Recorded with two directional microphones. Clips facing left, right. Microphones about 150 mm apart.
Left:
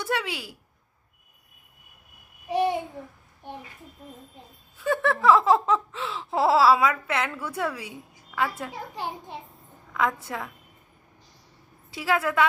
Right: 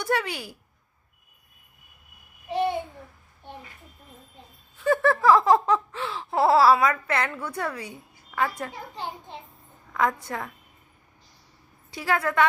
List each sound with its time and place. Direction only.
0.0 s laughter: centre (ahead or behind)
2.5 s babbling: 15° left (ahead or behind)
4.8 s laughter: centre (ahead or behind)
9.0 s a child's voice: 10° left (ahead or behind)
9.9 s a woman's voice: centre (ahead or behind)
10.2 s laughter: centre (ahead or behind)
11.9 s laughter: 5° left (ahead or behind)